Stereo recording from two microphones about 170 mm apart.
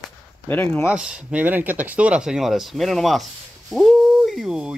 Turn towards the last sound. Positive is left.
turn(degrees=-5)  # may be behind; listen again after turning